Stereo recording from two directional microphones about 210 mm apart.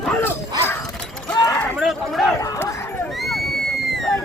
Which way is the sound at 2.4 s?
15° left (ahead or behind).